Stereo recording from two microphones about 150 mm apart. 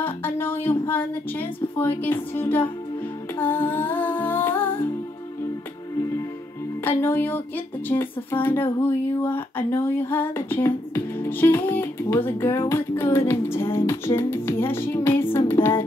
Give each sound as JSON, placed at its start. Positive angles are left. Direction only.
{"t": 0.0, "sound": "speech", "side_deg": 15}
{"t": 3.3, "sound": "humming", "side_deg": 15}
{"t": 7.0, "sound": "speech", "side_deg": 15}
{"t": 13.3, "sound": "music", "side_deg": 15}